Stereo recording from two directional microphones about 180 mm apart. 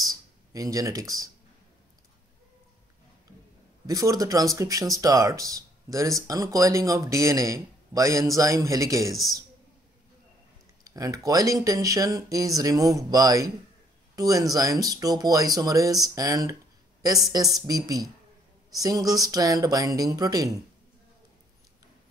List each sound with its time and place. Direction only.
0.0 s a sound: 20° right (ahead or behind)
3.8 s speech: 20° right (ahead or behind)
9.1 s a man's voice: centre (ahead or behind)
10.8 s speech: 20° right (ahead or behind)